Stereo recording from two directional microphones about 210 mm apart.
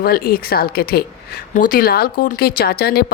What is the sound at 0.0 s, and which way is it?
Speech, 45° left (ahead or behind).